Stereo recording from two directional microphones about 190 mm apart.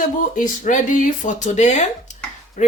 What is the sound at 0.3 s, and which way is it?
A woman's voice, 40° left (ahead or behind).